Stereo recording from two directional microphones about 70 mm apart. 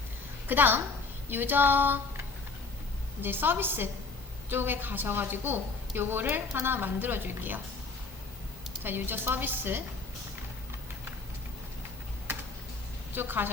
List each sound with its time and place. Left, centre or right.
0.4 s a woman's voice: right
8.8 s a woman's voice: right
12.3 s typing: right
13.1 s a woman's voice: right